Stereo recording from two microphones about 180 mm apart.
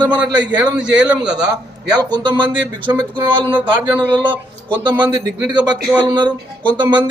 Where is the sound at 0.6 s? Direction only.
5° right (ahead or behind).